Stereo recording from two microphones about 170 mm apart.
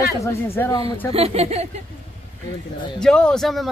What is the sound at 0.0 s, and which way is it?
Speech, 15° left (ahead or behind).